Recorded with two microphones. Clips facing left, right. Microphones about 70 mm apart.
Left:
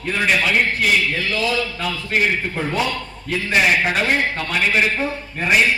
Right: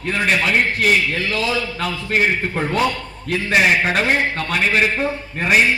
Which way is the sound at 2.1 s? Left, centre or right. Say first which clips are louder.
Right 1 dB; right.